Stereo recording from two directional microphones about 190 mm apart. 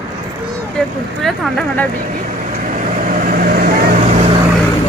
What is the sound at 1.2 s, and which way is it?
Speech, centre (ahead or behind).